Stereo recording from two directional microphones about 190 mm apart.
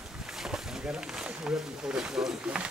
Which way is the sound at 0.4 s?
5° right (ahead or behind).